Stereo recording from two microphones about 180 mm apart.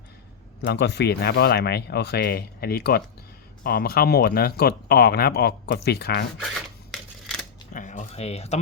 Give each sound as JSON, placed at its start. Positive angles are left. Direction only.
{"t": 0.6, "sound": "speech", "side_deg": 70}
{"t": 6.9, "sound": "typewriter", "side_deg": 5}
{"t": 7.7, "sound": "speech", "side_deg": 45}